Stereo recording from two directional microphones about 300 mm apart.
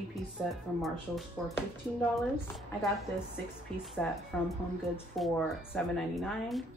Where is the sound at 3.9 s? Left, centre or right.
Centre.